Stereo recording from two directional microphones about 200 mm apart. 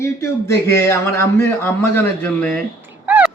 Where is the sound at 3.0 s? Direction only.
5° right (ahead or behind).